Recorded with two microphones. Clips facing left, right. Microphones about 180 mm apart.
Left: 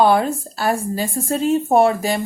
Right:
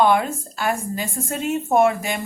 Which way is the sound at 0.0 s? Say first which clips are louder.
Left 3 dB; 35° left (ahead or behind).